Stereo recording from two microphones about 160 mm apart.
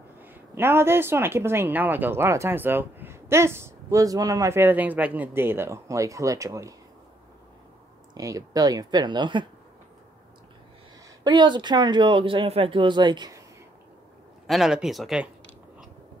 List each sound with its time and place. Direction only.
0.2 s speech: 15° right (ahead or behind)
8.1 s speech: 20° right (ahead or behind)
11.2 s speech: 30° right (ahead or behind)
14.5 s speech: 5° right (ahead or behind)